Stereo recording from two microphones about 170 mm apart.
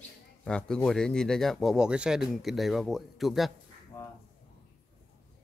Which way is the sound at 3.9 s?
15° left (ahead or behind).